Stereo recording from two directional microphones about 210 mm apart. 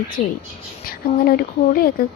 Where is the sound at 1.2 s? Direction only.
45° left (ahead or behind).